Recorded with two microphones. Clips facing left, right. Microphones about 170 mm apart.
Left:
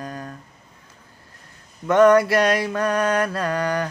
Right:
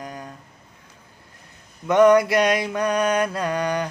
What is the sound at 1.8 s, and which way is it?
Mantra, 15° right (ahead or behind).